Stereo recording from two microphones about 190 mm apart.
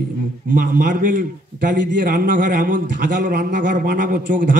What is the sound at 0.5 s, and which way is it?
A man's voice, 45° right (ahead or behind).